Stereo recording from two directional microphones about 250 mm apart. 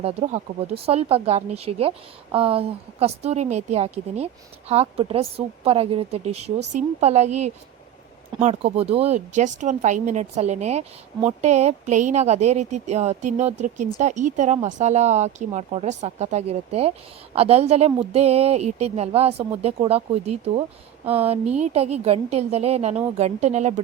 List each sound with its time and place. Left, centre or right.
0.0 s speech: right
8.4 s speech: right